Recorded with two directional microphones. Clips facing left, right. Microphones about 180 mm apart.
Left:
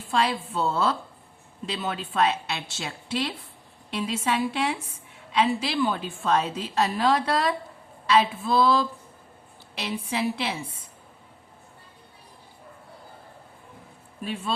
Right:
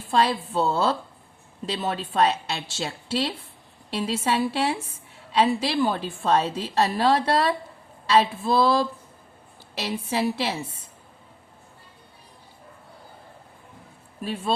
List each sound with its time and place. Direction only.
0.1 s a woman's voice: 35° right (ahead or behind)
14.2 s speech: 40° right (ahead or behind)